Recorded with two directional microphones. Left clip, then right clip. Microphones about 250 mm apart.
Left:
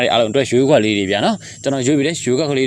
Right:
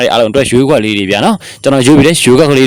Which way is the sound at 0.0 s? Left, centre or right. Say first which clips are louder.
Right 6 dB; right.